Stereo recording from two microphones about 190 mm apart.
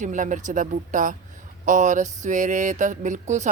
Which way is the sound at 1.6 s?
40° right (ahead or behind).